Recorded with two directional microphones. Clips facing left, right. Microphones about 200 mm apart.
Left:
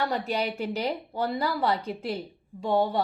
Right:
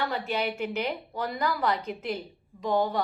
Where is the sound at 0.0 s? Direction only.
40° left (ahead or behind).